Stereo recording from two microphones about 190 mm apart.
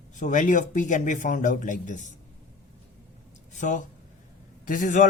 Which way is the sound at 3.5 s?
40° left (ahead or behind).